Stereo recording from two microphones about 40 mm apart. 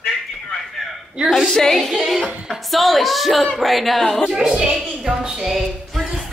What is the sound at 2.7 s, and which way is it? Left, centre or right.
Speech, centre.